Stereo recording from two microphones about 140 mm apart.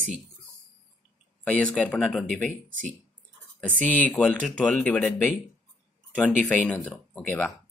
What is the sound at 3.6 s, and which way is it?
Speech, 10° left (ahead or behind).